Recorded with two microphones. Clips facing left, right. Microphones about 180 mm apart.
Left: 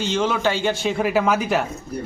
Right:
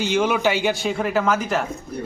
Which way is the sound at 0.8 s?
5° left (ahead or behind).